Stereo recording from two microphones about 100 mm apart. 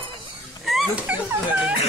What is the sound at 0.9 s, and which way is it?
Dog, 15° right (ahead or behind).